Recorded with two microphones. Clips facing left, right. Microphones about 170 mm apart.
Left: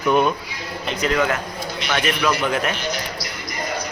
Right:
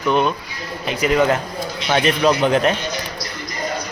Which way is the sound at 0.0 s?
5° left (ahead or behind).